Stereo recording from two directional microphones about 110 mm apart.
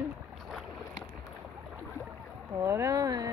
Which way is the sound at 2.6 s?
25° right (ahead or behind).